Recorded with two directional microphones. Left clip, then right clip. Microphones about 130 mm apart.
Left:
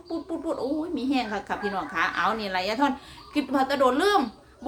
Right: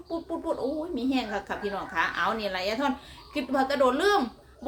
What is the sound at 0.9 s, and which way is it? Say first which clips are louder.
A woman's voice: left 2 dB; 15° left (ahead or behind).